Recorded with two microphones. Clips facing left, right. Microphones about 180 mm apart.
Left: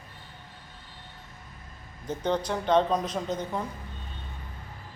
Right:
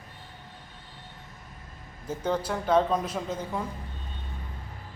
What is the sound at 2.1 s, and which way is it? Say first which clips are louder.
Speech: left 1 dB; 5° right (ahead or behind).